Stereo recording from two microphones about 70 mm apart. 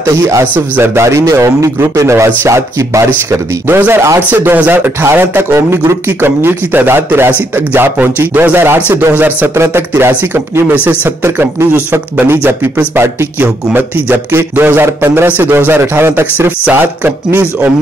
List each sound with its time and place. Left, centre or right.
0.0 s speech: right
3.3 s speech: right
4.3 s a man's voice: right
9.6 s speech: right
12.3 s a man's voice: right
15.2 s a man's voice: right